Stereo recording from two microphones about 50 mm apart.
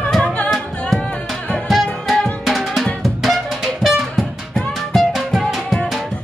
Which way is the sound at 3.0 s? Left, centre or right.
Centre.